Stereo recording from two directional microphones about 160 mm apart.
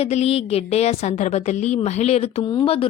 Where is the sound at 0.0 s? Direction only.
40° left (ahead or behind).